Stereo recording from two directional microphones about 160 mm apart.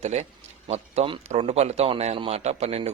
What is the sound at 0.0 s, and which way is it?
A man's voice, 45° right (ahead or behind).